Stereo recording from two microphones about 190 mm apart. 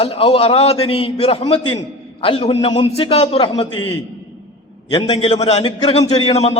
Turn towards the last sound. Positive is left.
turn(degrees=35)  # may be behind; listen again after turning